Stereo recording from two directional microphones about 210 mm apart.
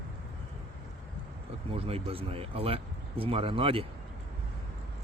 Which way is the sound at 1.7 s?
25° right (ahead or behind).